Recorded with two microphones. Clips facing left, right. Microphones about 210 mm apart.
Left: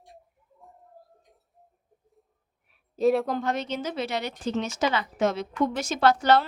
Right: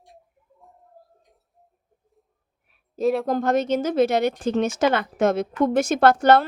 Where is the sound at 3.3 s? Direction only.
45° right (ahead or behind).